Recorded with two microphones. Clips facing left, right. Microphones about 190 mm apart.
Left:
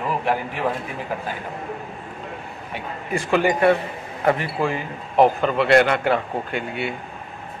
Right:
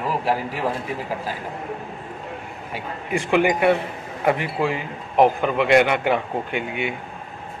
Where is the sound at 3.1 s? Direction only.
15° right (ahead or behind).